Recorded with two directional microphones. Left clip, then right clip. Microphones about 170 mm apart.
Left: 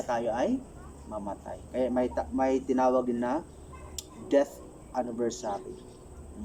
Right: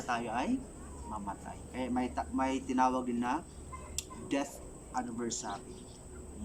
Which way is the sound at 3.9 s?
20° right (ahead or behind).